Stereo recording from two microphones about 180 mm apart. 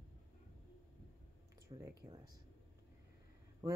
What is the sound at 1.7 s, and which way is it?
Speech, 20° right (ahead or behind).